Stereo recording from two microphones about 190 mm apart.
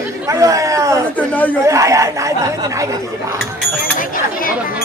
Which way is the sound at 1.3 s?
10° left (ahead or behind).